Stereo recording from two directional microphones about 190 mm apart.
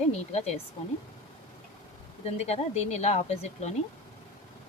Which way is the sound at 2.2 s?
35° left (ahead or behind).